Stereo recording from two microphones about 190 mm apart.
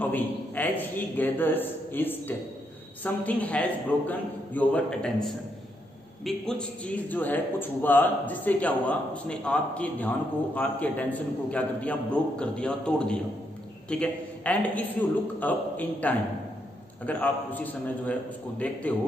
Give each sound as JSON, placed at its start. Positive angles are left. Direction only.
{"t": 0.0, "sound": "a man's voice", "side_deg": 10}